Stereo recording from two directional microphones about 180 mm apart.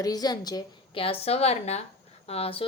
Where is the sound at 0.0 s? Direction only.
20° left (ahead or behind).